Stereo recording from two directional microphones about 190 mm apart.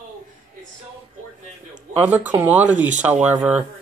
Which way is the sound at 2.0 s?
10° right (ahead or behind).